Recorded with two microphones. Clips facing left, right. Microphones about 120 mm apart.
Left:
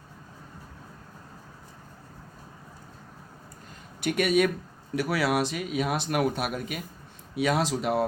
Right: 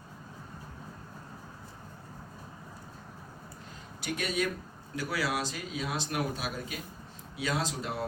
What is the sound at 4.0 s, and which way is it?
Speech, 65° left (ahead or behind).